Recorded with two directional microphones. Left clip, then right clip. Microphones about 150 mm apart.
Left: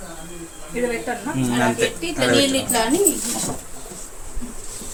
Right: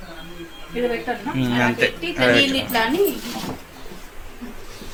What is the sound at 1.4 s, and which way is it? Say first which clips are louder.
Speech: right 1 dB; centre (ahead or behind).